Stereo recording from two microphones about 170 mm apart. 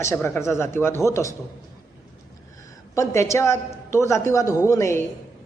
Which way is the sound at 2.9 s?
20° left (ahead or behind).